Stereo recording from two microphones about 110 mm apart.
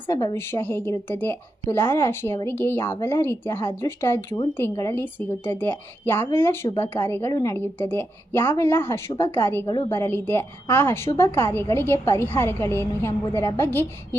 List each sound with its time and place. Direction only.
0.1 s a woman's voice: 35° left (ahead or behind)
0.3 s a woman's voice: 20° left (ahead or behind)